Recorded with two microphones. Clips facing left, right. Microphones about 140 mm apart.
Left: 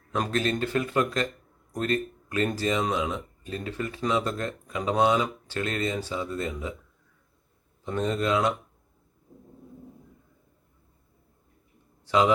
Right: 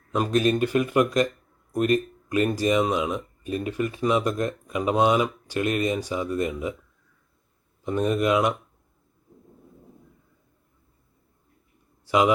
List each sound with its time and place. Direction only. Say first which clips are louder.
0.1 s speech: right 5 dB; 15° right (ahead or behind)
7.9 s speech: right 4 dB; 15° right (ahead or behind)
12.0 s a man's voice: right 2 dB; 10° right (ahead or behind)